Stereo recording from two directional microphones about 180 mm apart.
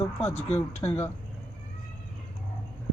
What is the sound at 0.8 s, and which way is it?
Speech, 15° left (ahead or behind).